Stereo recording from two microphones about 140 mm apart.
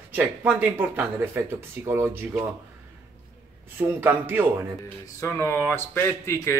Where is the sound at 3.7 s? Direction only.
15° right (ahead or behind).